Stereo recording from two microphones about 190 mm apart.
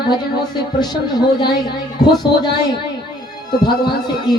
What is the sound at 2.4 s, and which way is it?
Speech, 20° left (ahead or behind).